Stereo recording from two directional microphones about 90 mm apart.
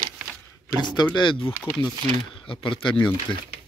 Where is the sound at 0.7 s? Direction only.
55° left (ahead or behind).